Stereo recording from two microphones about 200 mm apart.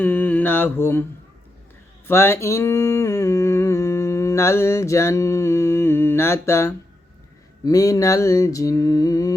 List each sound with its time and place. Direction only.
0.0 s mantra: 10° left (ahead or behind)
2.0 s a sound: 10° left (ahead or behind)
7.6 s mantra: 15° left (ahead or behind)